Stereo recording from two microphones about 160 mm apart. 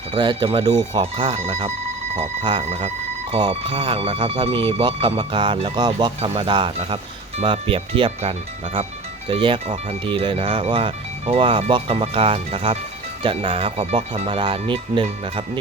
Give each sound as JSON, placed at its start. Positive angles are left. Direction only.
{"t": 0.1, "sound": "speech", "side_deg": -30}
{"t": 1.0, "sound": "speech", "side_deg": -40}
{"t": 3.5, "sound": "speech", "side_deg": -30}